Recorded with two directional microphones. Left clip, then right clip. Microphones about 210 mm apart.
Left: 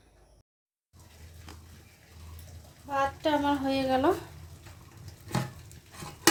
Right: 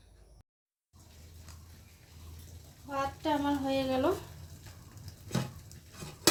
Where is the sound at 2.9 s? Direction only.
15° left (ahead or behind).